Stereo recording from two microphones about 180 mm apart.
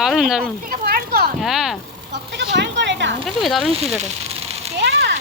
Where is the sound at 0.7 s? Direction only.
55° right (ahead or behind).